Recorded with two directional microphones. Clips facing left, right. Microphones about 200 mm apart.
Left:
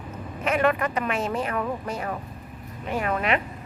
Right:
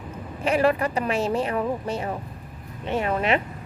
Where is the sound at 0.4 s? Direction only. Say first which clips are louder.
Right 2 dB; 30° right (ahead or behind).